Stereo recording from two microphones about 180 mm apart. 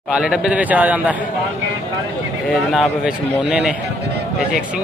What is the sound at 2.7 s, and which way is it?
A man's voice, 5° right (ahead or behind).